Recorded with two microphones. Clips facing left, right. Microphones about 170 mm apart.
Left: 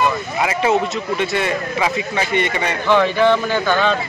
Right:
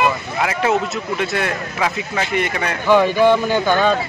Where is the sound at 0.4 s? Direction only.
Centre (ahead or behind).